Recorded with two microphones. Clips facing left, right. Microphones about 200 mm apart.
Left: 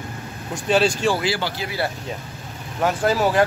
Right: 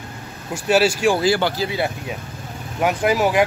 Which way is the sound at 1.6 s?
20° right (ahead or behind).